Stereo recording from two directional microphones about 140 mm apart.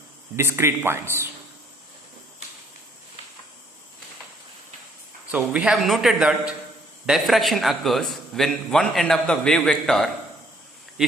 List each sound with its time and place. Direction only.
0.3 s speech: 20° right (ahead or behind)
5.3 s a man's voice: 5° right (ahead or behind)